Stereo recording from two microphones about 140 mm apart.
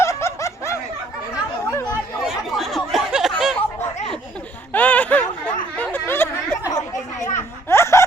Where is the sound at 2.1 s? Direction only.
Centre (ahead or behind).